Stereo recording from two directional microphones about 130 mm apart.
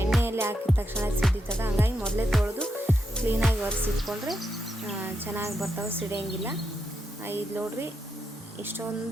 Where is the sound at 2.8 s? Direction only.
15° right (ahead or behind).